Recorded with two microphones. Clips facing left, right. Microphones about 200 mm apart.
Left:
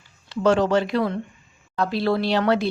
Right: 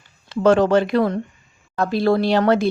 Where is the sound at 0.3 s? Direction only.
50° right (ahead or behind).